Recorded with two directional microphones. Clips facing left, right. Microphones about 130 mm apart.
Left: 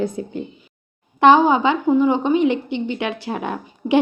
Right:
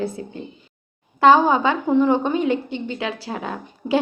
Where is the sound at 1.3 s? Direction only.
15° left (ahead or behind).